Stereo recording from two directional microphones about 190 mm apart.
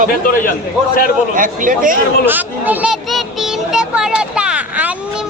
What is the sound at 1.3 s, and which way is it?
Speech, 45° right (ahead or behind).